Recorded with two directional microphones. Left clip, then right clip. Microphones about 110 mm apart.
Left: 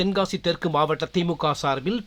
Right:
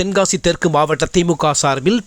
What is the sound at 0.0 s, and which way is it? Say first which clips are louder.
Speech: right 8 dB; 50° right (ahead or behind).